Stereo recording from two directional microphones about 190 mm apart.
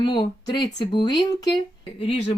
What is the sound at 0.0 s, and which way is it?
Speech, 25° left (ahead or behind).